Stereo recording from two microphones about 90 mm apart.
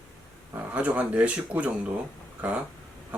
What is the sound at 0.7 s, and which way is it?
Speech, 15° right (ahead or behind).